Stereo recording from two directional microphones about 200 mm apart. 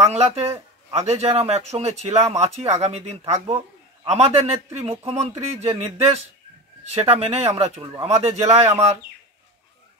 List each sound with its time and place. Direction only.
0.0 s a man's voice: 30° right (ahead or behind)